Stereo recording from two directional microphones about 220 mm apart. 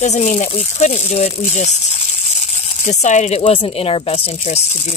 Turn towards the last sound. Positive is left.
turn(degrees=30)  # may be behind; listen again after turning